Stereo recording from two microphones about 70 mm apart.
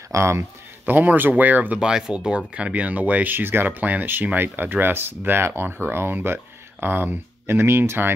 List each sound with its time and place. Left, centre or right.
0.1 s a sound: right
0.9 s speech: right
1.8 s speech: centre; by 8.1 s right